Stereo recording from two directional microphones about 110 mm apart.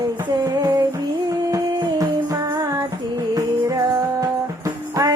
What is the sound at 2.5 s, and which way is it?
Music, 25° right (ahead or behind).